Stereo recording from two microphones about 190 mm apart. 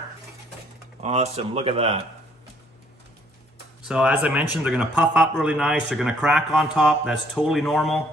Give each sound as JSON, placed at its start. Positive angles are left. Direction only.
{"t": 1.0, "sound": "speech", "side_deg": -35}
{"t": 3.8, "sound": "speech", "side_deg": -5}